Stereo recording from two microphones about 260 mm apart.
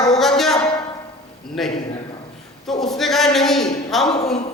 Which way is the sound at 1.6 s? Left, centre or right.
Centre.